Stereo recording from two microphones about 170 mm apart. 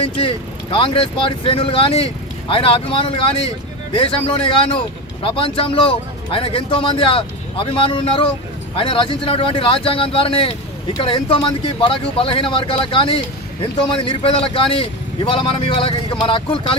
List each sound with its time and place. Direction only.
0.0 s speech: 30° left (ahead or behind)